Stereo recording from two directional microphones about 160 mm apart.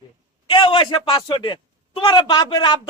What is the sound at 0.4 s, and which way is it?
A man's voice, 35° left (ahead or behind).